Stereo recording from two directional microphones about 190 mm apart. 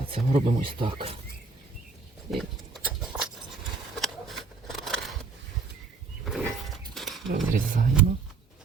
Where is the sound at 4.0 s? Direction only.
Centre (ahead or behind).